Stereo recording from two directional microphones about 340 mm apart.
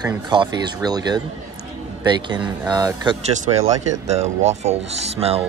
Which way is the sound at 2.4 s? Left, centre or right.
Centre.